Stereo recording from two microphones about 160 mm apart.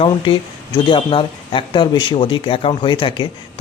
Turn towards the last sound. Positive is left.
turn(degrees=30)  # may be behind; listen again after turning